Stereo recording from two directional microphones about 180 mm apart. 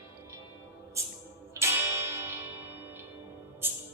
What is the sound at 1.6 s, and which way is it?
Music, 15° right (ahead or behind).